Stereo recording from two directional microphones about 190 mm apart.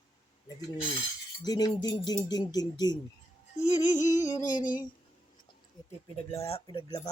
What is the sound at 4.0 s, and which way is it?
Cutlery, 40° left (ahead or behind).